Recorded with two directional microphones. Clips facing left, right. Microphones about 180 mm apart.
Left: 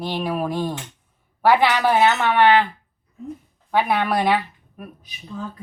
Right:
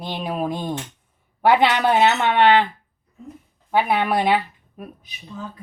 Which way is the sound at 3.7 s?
15° right (ahead or behind).